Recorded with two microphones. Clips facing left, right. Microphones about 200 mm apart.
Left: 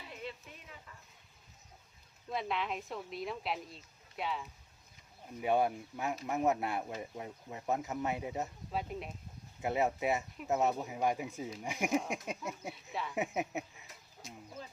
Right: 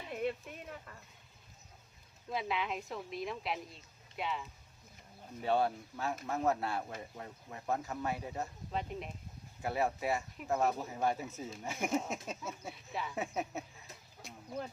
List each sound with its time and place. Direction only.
0.1 s a sound: 55° right (ahead or behind)
2.3 s a woman's voice: centre (ahead or behind)
5.4 s speech: 15° left (ahead or behind)
8.7 s a woman's voice: centre (ahead or behind)
9.6 s speech: 20° left (ahead or behind)
12.7 s a woman's voice: centre (ahead or behind)
13.1 s speech: 15° left (ahead or behind)
14.2 s a sound: 60° right (ahead or behind)